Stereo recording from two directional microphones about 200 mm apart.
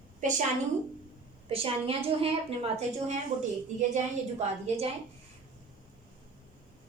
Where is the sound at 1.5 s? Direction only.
30° right (ahead or behind).